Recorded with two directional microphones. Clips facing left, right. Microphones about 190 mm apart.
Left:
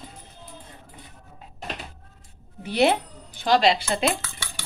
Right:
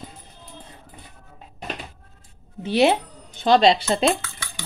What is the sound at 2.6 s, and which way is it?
Speech, 15° right (ahead or behind).